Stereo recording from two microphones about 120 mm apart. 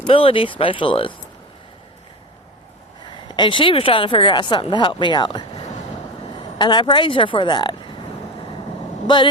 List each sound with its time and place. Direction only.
0.1 s speech: 50° left (ahead or behind)
3.1 s speech: 40° left (ahead or behind)